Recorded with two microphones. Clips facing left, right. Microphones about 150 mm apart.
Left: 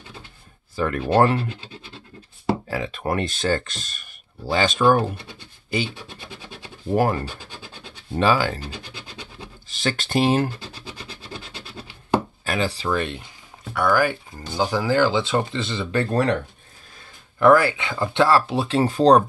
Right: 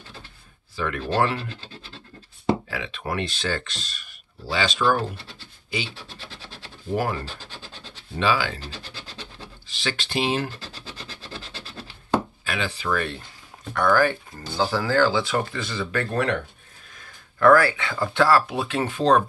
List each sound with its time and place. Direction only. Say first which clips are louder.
0.7 s speech: left 5 dB; 45° left (ahead or behind)
1.5 s speech: left 3 dB; 15° left (ahead or behind)
2.7 s speech: left 5 dB; 45° left (ahead or behind)
5.9 s scratch: left 3 dB; 15° left (ahead or behind)
6.9 s speech: left 5 dB; 45° left (ahead or behind)
7.2 s scratch: left 2 dB; 15° left (ahead or behind)
8.2 s speech: left 4 dB; 45° left (ahead or behind)
8.6 s a sound: left 2 dB; 15° left (ahead or behind)
9.7 s speech: left 5 dB; 45° left (ahead or behind)
11.3 s scratch: left 1 dB; 15° left (ahead or behind)
12.4 s speech: left 3 dB; 40° left (ahead or behind); by 13.2 s 20° left (ahead or behind)
13.7 s speech: even; 10° left (ahead or behind); by 16.3 s 35° left (ahead or behind)
17.4 s speech: left 1 dB; 20° left (ahead or behind); by 19.2 s 35° left (ahead or behind)